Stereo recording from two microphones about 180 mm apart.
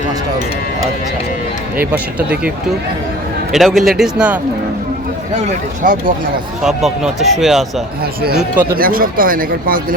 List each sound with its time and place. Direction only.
1.8 s speech: 10° right (ahead or behind)
3.5 s speech: centre (ahead or behind)
5.8 s speech: 50° right (ahead or behind)
6.6 s speech: 5° right (ahead or behind)
8.7 s speech: 55° right (ahead or behind)